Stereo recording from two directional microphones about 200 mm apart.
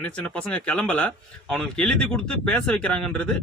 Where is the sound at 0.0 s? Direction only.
5° left (ahead or behind).